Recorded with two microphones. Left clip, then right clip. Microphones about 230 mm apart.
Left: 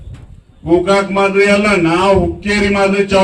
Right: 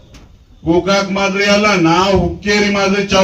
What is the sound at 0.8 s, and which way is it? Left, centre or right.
A man's voice, left.